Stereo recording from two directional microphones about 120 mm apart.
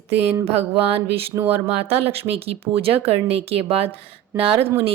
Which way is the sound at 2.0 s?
55° right (ahead or behind).